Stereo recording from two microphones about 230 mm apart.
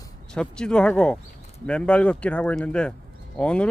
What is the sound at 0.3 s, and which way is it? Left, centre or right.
Speech, centre.